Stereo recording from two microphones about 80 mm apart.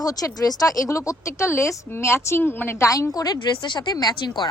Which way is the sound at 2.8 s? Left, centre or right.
Left.